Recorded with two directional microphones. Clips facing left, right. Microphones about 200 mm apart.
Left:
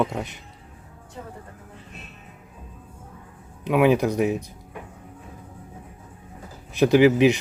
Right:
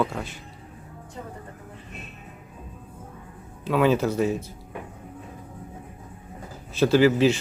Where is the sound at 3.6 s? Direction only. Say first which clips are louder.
Left 2 dB; 15° left (ahead or behind).